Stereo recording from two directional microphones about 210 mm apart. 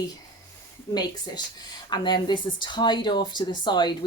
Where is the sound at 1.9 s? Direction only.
20° left (ahead or behind).